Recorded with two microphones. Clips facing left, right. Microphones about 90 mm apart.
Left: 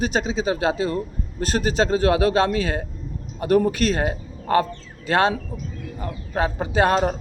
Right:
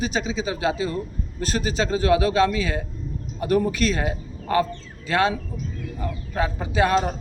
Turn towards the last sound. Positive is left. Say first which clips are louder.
# left 2 dB
turn(degrees=50)  # may be behind; listen again after turning